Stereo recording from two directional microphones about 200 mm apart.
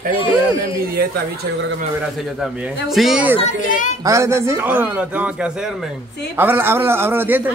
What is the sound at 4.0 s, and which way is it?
Speech, 15° right (ahead or behind).